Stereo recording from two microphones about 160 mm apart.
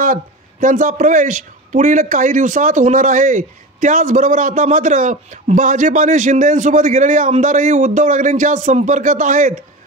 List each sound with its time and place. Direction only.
0.0 s speech: 55° right (ahead or behind)